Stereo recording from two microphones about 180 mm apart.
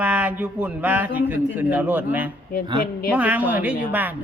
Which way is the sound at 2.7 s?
55° left (ahead or behind).